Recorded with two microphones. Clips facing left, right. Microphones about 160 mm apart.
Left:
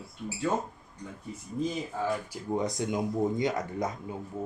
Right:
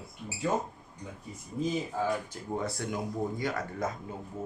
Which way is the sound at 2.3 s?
15° left (ahead or behind).